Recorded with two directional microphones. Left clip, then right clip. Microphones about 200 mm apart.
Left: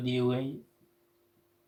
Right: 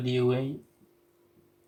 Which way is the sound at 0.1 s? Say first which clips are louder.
Right 4 dB; 20° left (ahead or behind).